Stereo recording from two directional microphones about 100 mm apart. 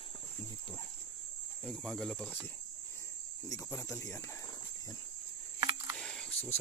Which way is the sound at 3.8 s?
25° left (ahead or behind).